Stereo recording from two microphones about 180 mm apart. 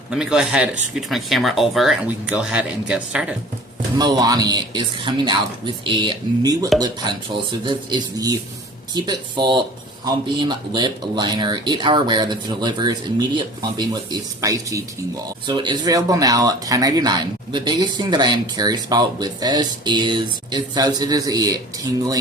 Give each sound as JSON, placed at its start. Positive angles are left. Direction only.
{"t": 0.1, "sound": "speech", "side_deg": -5}
{"t": 3.9, "sound": "speech", "side_deg": -25}